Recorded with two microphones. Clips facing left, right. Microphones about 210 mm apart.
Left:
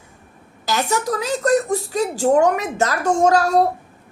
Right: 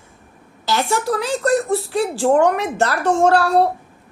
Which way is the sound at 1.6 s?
45° left (ahead or behind).